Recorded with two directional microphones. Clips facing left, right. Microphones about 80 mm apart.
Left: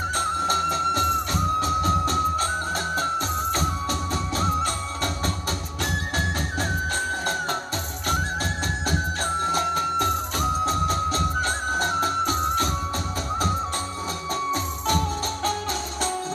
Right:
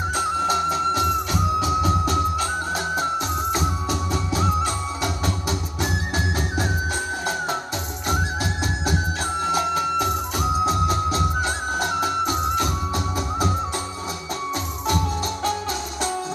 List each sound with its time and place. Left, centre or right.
0.1 s music: centre
9.4 s music: centre